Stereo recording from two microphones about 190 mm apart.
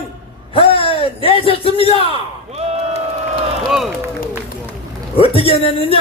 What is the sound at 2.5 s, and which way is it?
Crowd, 35° right (ahead or behind).